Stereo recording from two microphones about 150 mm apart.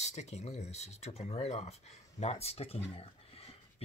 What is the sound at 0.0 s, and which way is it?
Speech, 45° left (ahead or behind).